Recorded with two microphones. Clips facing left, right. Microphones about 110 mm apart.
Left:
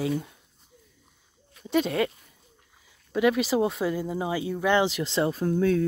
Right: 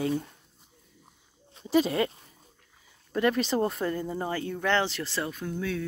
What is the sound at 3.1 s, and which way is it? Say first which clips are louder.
Speech: left 3 dB; 5° left (ahead or behind).